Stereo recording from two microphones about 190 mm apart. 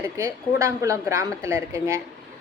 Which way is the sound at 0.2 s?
15° right (ahead or behind).